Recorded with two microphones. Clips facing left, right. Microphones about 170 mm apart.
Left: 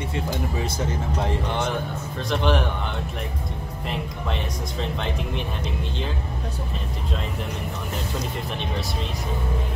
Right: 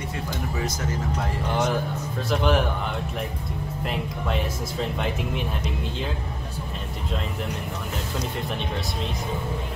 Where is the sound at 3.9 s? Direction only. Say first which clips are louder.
Right 1 dB; centre (ahead or behind).